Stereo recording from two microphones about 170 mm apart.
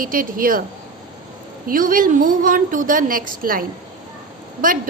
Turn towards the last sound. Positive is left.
turn(degrees=-55)  # may be behind; listen again after turning